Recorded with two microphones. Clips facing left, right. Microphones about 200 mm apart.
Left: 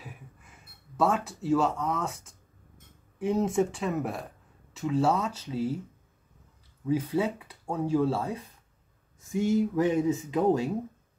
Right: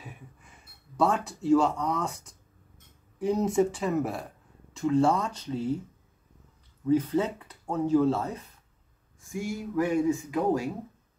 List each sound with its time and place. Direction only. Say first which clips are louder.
0.9 s speech: even; 5° left (ahead or behind)
6.9 s speech: right 2 dB; 10° left (ahead or behind)
9.2 s speech: left 8 dB; 20° left (ahead or behind)